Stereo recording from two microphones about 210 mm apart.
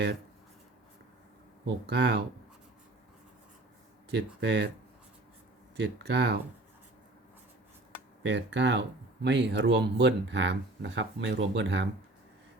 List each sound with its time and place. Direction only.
1.6 s speech: 50° right (ahead or behind)
4.4 s speech: 55° right (ahead or behind)
5.7 s speech: 55° right (ahead or behind)
8.2 s speech: 55° right (ahead or behind)